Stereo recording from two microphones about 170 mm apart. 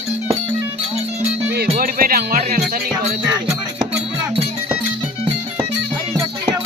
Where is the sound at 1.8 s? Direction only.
60° right (ahead or behind).